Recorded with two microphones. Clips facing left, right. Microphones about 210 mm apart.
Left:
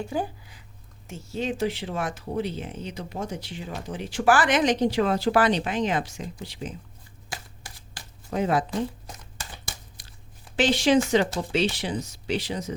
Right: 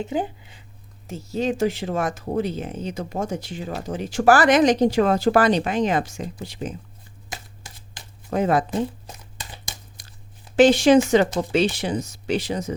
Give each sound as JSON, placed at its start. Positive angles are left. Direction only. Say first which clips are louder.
{"t": 0.0, "sound": "speech", "louder": "right 3 dB", "side_deg": -20}
{"t": 1.0, "sound": "speech", "louder": "right 5 dB", "side_deg": -40}
{"t": 7.3, "sound": "shuffling cards", "louder": "right 1 dB", "side_deg": -20}
{"t": 8.3, "sound": "speech", "louder": "right 4 dB", "side_deg": -50}
{"t": 10.6, "sound": "speech", "louder": "right 7 dB", "side_deg": -50}